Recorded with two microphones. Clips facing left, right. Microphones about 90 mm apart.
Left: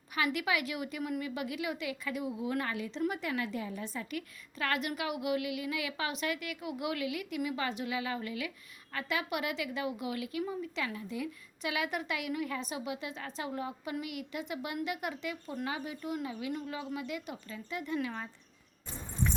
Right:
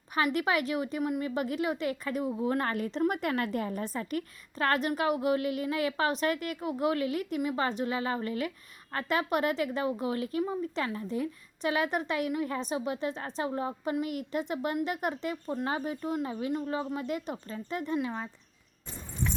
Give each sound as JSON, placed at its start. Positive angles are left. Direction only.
{"t": 0.3, "sound": "a woman's voice", "side_deg": -40}
{"t": 17.9, "sound": "speech", "side_deg": -25}